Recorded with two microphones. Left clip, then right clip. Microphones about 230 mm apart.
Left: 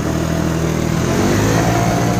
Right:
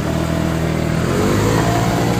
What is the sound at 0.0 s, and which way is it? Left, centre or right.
Vehicle, left.